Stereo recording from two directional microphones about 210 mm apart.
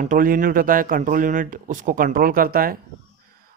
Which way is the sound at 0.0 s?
40° right (ahead or behind).